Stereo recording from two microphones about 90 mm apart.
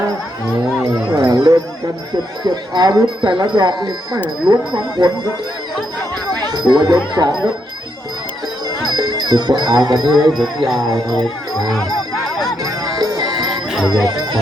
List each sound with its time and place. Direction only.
1.1 s music: 45° right (ahead or behind)
2.4 s speech: 50° right (ahead or behind)
6.4 s speech: 50° right (ahead or behind)
8.9 s speech: 50° right (ahead or behind)
10.3 s speech: centre (ahead or behind)
12.8 s music: 50° right (ahead or behind)
13.7 s jingle bell: 5° right (ahead or behind)